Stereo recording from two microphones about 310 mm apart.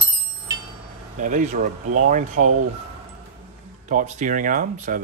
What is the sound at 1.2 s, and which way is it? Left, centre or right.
Speech, right.